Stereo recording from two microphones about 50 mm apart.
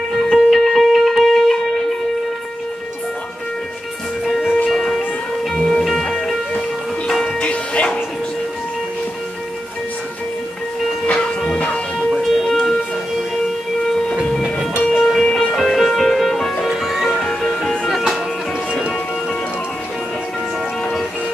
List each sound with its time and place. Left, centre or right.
0.3 s music: centre
4.3 s music: centre
7.3 s music: left
11.1 s music: centre
12.4 s music: centre
14.8 s train: left
15.5 s music: centre
16.6 s music: centre
17.8 s music: centre